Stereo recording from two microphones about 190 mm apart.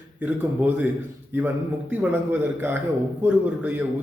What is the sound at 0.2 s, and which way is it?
Speech, 10° right (ahead or behind).